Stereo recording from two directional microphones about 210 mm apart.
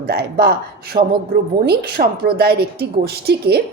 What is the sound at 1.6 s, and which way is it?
A woman's voice, 50° right (ahead or behind).